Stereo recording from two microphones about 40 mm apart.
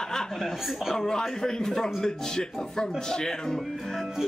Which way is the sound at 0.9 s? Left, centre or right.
Centre.